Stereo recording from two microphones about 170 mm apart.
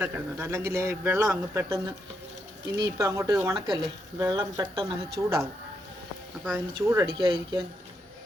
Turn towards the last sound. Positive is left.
turn(degrees=-25)  # may be behind; listen again after turning